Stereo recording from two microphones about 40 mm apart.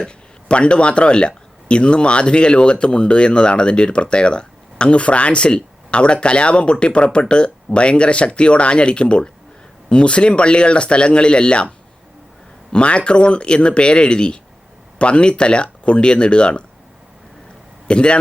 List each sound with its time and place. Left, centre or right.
0.0 s speech: left
12.7 s speech: left
17.8 s speech: left